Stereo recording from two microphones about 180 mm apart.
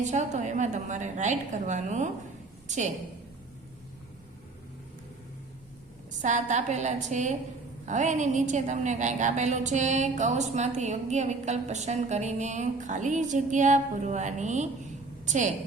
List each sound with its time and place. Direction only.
0.0 s a woman's voice: 40° right (ahead or behind)
6.1 s a woman's voice: 45° right (ahead or behind)